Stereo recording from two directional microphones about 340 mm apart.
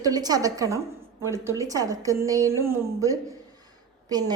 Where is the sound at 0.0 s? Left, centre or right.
Centre.